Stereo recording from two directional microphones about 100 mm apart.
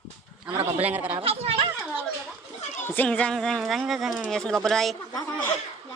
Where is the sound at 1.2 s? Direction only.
75° right (ahead or behind).